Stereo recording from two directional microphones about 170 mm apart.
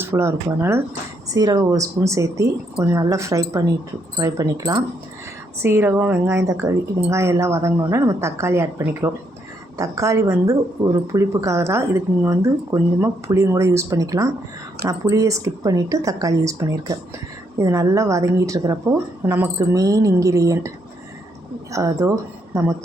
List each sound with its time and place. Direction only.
0.0 s a woman's voice: 15° right (ahead or behind)